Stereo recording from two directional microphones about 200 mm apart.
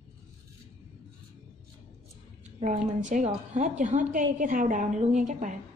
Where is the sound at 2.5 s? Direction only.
35° right (ahead or behind).